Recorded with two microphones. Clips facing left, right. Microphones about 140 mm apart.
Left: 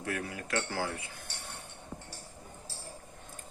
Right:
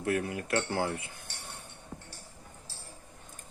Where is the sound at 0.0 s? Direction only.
25° right (ahead or behind).